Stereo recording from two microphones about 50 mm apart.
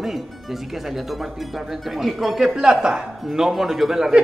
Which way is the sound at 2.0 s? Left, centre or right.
Centre.